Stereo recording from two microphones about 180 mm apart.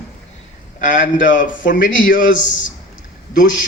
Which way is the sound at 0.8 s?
45° left (ahead or behind).